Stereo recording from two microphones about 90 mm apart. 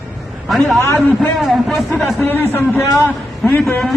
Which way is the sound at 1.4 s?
Centre (ahead or behind).